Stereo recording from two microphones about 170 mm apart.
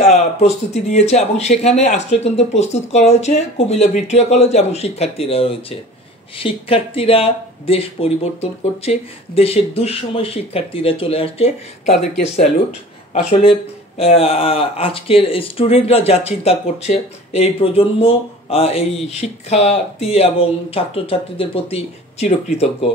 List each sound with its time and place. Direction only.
0.0 s speech: 40° left (ahead or behind)
13.1 s speech: 35° left (ahead or behind)